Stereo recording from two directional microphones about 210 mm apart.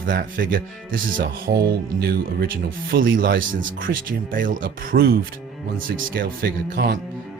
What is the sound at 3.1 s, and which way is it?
Speech, 40° right (ahead or behind).